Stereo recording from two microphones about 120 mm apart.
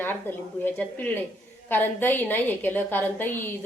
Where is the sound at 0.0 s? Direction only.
15° left (ahead or behind).